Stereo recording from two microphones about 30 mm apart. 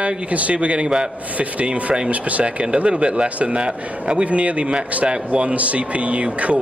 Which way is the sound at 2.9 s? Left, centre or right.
Right.